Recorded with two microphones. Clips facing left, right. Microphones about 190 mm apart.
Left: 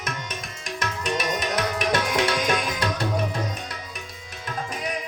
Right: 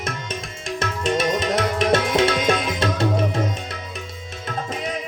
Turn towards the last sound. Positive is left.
turn(degrees=-25)  # may be behind; listen again after turning